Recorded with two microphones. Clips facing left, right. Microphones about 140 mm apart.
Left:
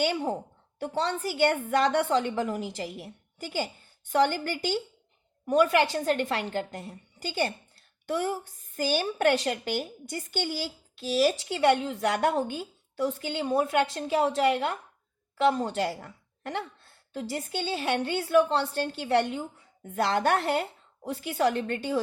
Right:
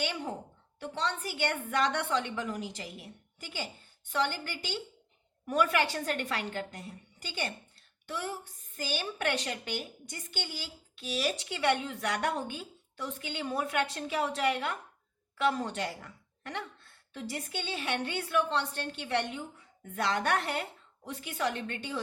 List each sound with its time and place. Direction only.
0.0 s a woman's voice: 35° left (ahead or behind)
5.5 s a woman's voice: 25° left (ahead or behind)
8.0 s a woman's voice: 45° left (ahead or behind)